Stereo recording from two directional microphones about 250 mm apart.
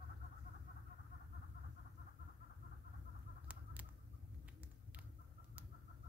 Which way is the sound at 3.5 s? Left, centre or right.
Centre.